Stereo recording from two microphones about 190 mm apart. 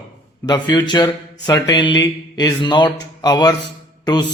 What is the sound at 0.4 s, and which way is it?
Speech, 20° left (ahead or behind).